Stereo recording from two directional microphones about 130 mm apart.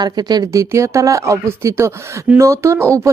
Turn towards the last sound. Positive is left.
turn(degrees=-20)  # may be behind; listen again after turning